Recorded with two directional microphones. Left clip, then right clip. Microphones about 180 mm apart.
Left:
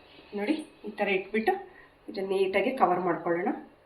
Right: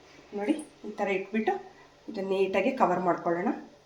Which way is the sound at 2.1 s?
30° right (ahead or behind).